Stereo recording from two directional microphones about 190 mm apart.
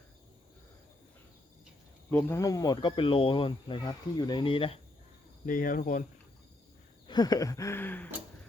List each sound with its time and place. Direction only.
2.0 s speech: 15° left (ahead or behind); by 4.8 s 30° left (ahead or behind)
5.5 s speech: 45° left (ahead or behind)
7.1 s a sound: 20° left (ahead or behind)